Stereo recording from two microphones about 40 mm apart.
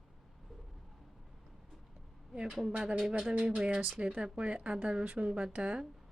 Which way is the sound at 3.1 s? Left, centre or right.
Right.